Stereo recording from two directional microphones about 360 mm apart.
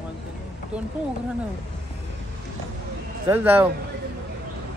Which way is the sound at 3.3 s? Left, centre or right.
Centre.